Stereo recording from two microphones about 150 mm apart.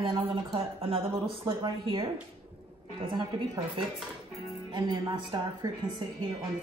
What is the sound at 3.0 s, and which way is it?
A woman's voice, 30° right (ahead or behind).